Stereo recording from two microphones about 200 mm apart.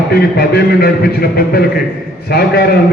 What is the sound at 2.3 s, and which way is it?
Speech, 50° left (ahead or behind).